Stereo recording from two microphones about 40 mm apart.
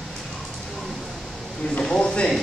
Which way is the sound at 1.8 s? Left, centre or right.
Left.